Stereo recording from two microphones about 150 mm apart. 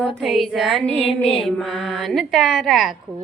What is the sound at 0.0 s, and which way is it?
A woman's voice, centre (ahead or behind).